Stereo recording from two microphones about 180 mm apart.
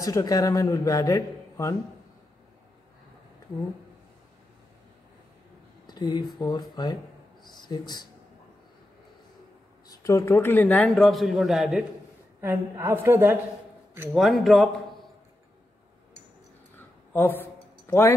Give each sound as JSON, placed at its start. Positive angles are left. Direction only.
{"t": 0.0, "sound": "a man's voice", "side_deg": 20}
{"t": 5.9, "sound": "a man's voice", "side_deg": 25}
{"t": 9.8, "sound": "a man's voice", "side_deg": 15}
{"t": 12.4, "sound": "a woman's voice", "side_deg": -15}
{"t": 14.1, "sound": "a man's voice", "side_deg": 0}
{"t": 17.1, "sound": "a sound", "side_deg": 10}